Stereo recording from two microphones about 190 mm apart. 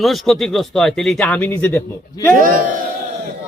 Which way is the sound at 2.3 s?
45° right (ahead or behind).